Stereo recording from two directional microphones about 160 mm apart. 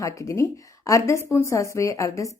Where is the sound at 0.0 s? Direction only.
20° left (ahead or behind).